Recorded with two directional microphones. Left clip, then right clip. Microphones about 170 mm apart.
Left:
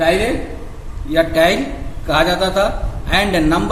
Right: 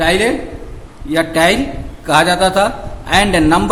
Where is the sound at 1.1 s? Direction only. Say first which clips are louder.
Right 1 dB; 35° right (ahead or behind).